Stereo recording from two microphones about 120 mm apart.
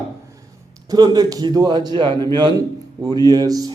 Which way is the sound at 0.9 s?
35° right (ahead or behind).